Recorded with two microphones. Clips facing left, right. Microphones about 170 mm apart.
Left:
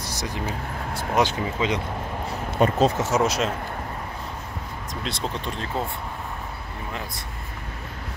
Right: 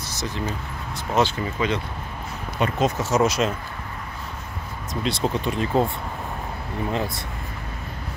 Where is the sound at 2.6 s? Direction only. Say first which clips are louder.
Left 3 dB; 35° left (ahead or behind).